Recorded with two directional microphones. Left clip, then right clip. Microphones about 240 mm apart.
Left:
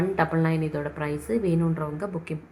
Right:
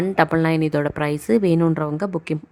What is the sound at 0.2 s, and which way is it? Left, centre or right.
Speech, right.